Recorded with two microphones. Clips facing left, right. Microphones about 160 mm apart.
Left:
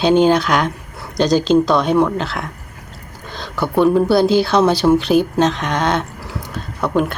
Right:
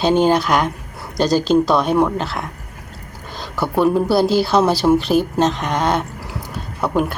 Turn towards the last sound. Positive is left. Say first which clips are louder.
# left 1 dB
turn(degrees=-5)  # may be behind; listen again after turning